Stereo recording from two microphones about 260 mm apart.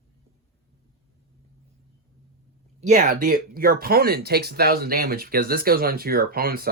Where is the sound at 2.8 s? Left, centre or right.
Right.